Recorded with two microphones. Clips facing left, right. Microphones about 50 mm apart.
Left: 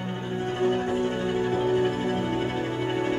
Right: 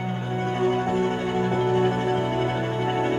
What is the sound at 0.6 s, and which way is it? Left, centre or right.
Music, right.